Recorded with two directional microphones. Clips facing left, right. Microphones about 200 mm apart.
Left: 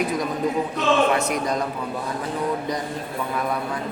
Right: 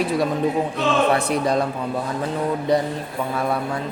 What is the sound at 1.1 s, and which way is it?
Speech, 30° right (ahead or behind).